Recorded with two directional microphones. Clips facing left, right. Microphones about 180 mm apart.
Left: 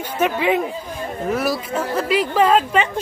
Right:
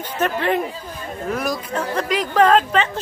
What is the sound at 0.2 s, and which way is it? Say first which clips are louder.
Speech: left 2 dB; 10° left (ahead or behind).